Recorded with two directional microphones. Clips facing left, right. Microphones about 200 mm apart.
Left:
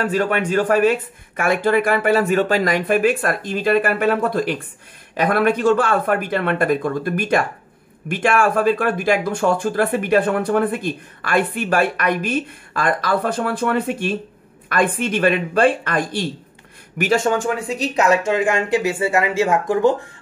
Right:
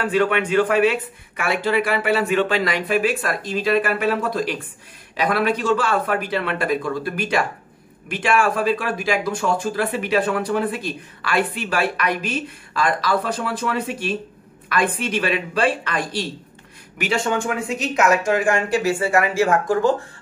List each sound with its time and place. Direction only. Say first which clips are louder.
0.0 s speech: even; 40° left (ahead or behind); by 20.0 s 20° left (ahead or behind)